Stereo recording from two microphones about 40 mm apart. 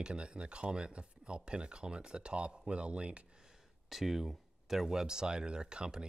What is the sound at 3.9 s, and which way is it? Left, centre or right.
Speech, centre.